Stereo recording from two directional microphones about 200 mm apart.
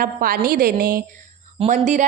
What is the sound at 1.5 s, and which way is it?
Speech, 35° right (ahead or behind).